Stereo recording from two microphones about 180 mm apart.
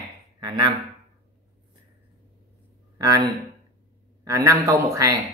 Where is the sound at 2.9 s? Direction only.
20° right (ahead or behind).